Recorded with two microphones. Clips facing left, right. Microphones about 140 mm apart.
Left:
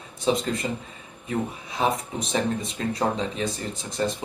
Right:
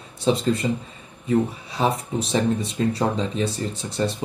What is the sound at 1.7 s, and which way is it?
Speech, 35° right (ahead or behind).